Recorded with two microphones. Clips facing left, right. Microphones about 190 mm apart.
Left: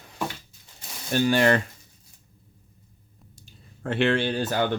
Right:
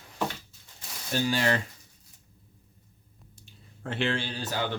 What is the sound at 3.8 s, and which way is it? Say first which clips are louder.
Speech: left 7 dB; 65° left (ahead or behind).